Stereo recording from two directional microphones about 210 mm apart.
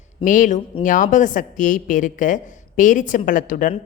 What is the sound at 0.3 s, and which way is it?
A woman's voice, 40° left (ahead or behind).